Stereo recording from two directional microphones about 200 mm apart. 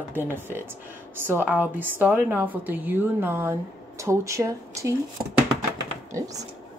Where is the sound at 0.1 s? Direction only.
10° right (ahead or behind).